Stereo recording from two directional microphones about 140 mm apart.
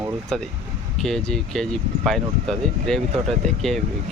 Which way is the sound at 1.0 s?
5° left (ahead or behind).